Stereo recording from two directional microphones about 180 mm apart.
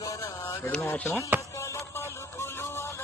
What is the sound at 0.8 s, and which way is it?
Music, 10° left (ahead or behind).